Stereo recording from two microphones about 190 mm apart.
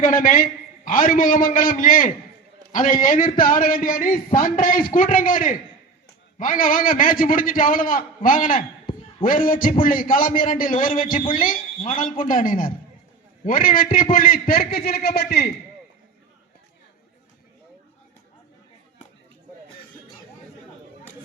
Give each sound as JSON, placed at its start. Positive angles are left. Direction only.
{"t": 0.0, "sound": "a man's voice", "side_deg": 45}